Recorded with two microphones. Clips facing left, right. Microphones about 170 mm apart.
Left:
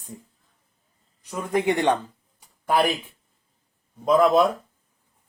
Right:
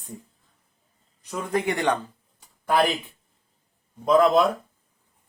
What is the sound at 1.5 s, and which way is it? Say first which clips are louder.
Speech: left 3 dB; 20° left (ahead or behind).